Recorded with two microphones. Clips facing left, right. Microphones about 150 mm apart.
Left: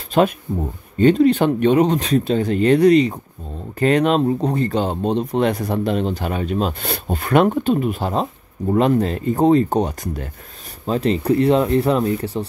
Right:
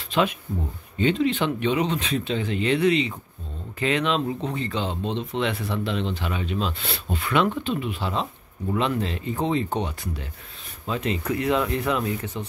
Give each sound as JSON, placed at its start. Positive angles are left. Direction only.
{"t": 0.5, "sound": "speech", "side_deg": 45}
{"t": 10.9, "sound": "speech", "side_deg": 35}